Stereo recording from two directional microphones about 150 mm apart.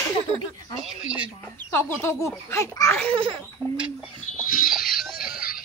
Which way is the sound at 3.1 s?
35° right (ahead or behind).